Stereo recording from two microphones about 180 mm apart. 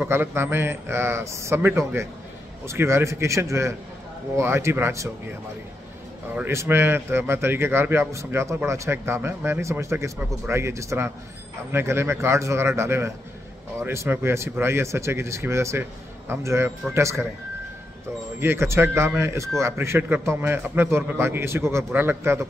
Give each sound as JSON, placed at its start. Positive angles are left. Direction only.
{"t": 0.0, "sound": "a man's voice", "side_deg": -10}
{"t": 6.3, "sound": "a man's voice", "side_deg": -15}
{"t": 18.4, "sound": "a man's voice", "side_deg": -15}